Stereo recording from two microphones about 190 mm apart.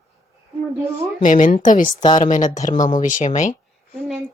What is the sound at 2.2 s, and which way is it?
Speech, 40° left (ahead or behind).